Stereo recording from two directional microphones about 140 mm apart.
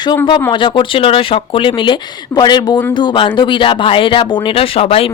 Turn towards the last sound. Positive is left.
turn(degrees=45)  # may be behind; listen again after turning